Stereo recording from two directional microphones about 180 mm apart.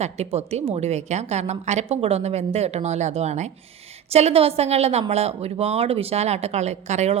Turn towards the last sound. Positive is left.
turn(degrees=-40)  # may be behind; listen again after turning